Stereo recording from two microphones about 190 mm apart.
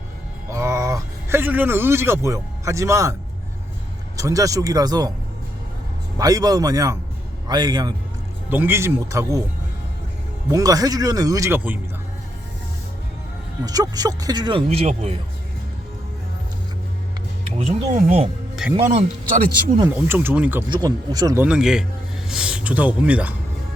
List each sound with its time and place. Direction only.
0.5 s speech: 15° right (ahead or behind)
4.2 s speech: 15° right (ahead or behind)
6.1 s speech: 20° right (ahead or behind)
8.4 s speech: 10° right (ahead or behind)
10.5 s speech: 20° right (ahead or behind)
13.7 s speech: 20° right (ahead or behind)
17.6 s speech: 35° right (ahead or behind)
18.6 s a man's voice: 5° right (ahead or behind)
19.9 s speech: 10° right (ahead or behind)
20.7 s speech: 20° right (ahead or behind)
21.4 s a man's voice: 5° right (ahead or behind)